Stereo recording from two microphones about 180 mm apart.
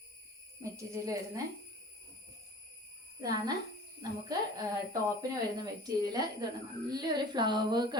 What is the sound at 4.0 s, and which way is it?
A woman's voice, 20° right (ahead or behind).